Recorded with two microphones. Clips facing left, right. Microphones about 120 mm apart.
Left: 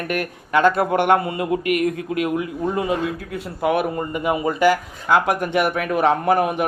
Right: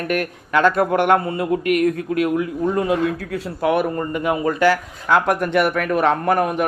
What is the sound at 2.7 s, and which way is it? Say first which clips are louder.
Speech: right 3 dB; 5° left (ahead or behind).